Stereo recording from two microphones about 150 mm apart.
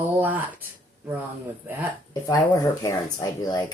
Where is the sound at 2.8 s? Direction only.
25° left (ahead or behind).